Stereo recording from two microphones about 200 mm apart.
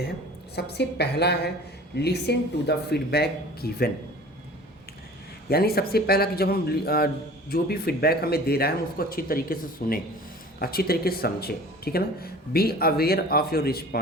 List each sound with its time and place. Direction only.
0.5 s speech: 55° left (ahead or behind)
5.5 s speech: 50° left (ahead or behind)